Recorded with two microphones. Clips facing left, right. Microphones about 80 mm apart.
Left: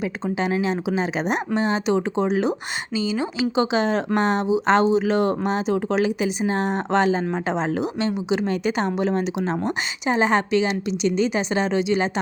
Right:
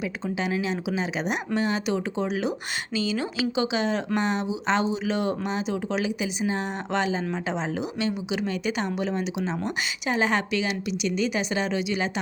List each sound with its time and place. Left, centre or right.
0.3 s a woman's voice: left
2.9 s speech: left
10.1 s a woman's voice: left